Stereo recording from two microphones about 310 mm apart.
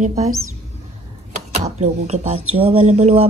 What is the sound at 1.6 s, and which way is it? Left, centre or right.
A woman's voice, right.